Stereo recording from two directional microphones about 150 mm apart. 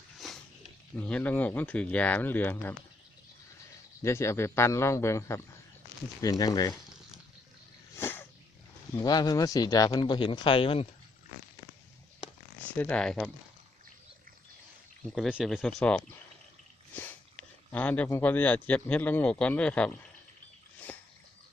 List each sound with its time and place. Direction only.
0.9 s speech: 10° left (ahead or behind)
4.0 s speech: 20° left (ahead or behind)
7.9 s a sound: 15° left (ahead or behind)
9.0 s speech: 25° left (ahead or behind)
12.7 s speech: 10° left (ahead or behind)
15.0 s speech: centre (ahead or behind)
20.9 s a sound: 10° left (ahead or behind)